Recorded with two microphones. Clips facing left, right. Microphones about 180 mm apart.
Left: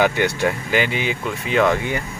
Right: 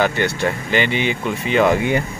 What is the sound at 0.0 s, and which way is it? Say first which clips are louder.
Speech: even; 10° left (ahead or behind).